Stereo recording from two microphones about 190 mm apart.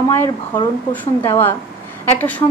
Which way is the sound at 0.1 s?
15° left (ahead or behind).